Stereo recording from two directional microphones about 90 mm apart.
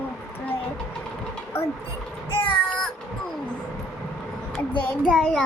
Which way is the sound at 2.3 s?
70° left (ahead or behind).